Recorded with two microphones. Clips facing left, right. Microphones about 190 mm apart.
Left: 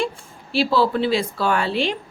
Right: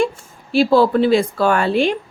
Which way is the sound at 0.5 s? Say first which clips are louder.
Right 6 dB; 50° right (ahead or behind).